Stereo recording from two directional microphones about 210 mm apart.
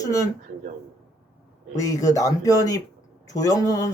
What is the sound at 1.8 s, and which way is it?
Speech, 15° left (ahead or behind).